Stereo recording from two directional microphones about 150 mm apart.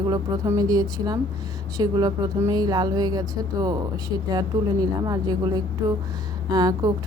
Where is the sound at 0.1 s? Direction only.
25° right (ahead or behind).